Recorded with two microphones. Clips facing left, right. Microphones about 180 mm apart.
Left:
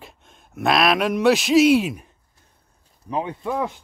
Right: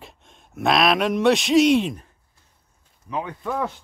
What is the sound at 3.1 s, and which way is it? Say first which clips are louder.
Speech: left 2 dB; 25° left (ahead or behind).